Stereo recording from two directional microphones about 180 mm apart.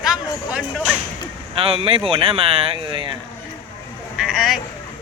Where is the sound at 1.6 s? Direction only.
30° right (ahead or behind).